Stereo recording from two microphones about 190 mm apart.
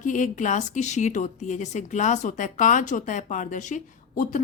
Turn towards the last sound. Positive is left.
turn(degrees=45)  # may be behind; listen again after turning